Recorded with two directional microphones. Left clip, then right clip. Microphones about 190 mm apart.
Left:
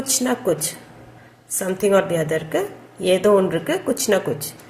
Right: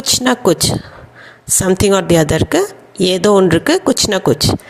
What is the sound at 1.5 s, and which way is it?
A woman's voice, 50° right (ahead or behind).